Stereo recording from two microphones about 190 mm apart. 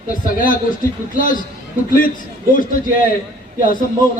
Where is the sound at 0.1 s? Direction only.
45° left (ahead or behind).